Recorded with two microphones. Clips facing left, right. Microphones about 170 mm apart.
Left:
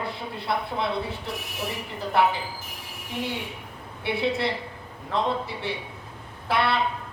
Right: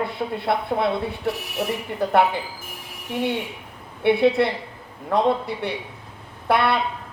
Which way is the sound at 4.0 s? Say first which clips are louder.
Right 8 dB; 55° right (ahead or behind).